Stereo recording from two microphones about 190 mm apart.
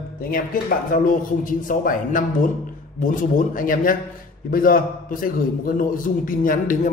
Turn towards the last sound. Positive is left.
turn(degrees=45)  # may be behind; listen again after turning